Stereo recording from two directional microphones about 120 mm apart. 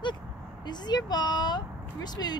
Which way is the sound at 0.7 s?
35° left (ahead or behind).